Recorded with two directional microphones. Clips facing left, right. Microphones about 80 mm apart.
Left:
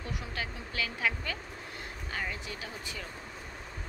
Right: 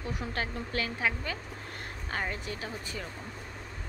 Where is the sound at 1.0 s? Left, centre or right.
Right.